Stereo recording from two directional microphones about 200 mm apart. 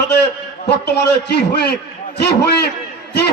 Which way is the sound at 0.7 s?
55° left (ahead or behind).